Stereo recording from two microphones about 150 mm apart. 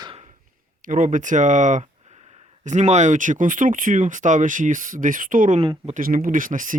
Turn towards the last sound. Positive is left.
turn(degrees=-60)  # may be behind; listen again after turning